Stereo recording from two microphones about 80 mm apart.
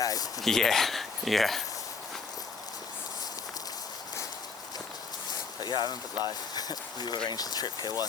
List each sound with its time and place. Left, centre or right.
0.0 s a sound: left
0.4 s speech: centre
5.5 s speech: left